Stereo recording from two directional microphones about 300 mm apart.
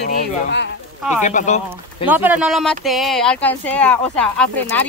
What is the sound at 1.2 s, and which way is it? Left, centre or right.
Speech, left.